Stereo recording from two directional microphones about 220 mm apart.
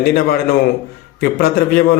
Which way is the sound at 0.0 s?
45° left (ahead or behind).